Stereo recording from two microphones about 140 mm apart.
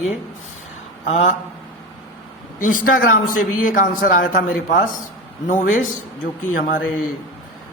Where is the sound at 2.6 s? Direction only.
75° left (ahead or behind).